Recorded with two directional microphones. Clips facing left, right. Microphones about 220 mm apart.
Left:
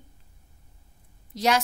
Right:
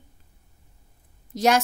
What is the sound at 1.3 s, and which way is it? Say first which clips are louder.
Speech: right 3 dB; 45° right (ahead or behind).